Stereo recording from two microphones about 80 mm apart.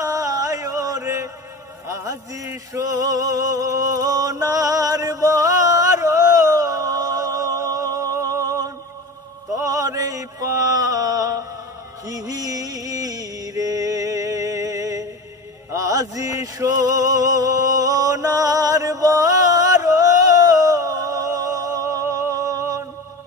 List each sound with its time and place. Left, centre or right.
0.0 s chant: right
1.9 s music: right
9.6 s mantra: right
12.1 s music: right
22.3 s a sound: right